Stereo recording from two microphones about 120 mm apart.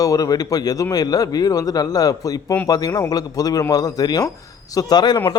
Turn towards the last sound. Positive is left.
turn(degrees=35)  # may be behind; listen again after turning